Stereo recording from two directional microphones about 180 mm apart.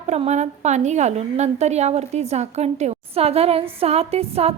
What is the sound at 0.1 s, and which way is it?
A woman's voice, 40° right (ahead or behind).